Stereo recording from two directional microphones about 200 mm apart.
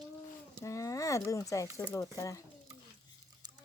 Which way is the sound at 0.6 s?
15° left (ahead or behind).